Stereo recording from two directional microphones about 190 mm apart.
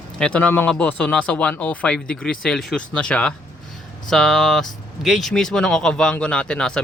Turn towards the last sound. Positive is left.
turn(degrees=5)  # may be behind; listen again after turning